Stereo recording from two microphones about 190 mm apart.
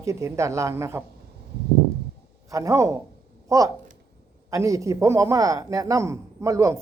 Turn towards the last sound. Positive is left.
turn(degrees=-15)  # may be behind; listen again after turning